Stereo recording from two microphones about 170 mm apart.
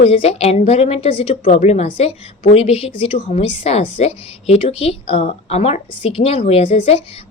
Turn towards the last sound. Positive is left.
turn(degrees=35)  # may be behind; listen again after turning